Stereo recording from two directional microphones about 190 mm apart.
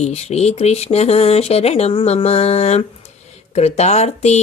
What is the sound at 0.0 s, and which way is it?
Speech, 35° left (ahead or behind).